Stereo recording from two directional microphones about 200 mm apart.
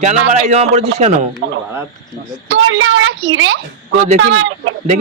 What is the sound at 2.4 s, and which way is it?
Speech, 85° right.